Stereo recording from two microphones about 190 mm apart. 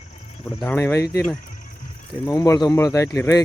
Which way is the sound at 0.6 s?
10° left (ahead or behind).